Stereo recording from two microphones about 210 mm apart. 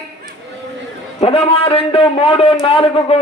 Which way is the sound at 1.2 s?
25° left (ahead or behind).